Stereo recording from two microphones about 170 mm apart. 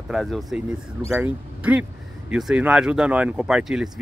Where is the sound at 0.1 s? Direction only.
Centre (ahead or behind).